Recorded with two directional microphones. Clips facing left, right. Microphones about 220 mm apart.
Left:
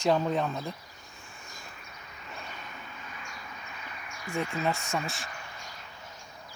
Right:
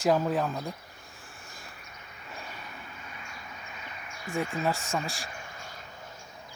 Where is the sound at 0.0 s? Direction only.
5° right (ahead or behind).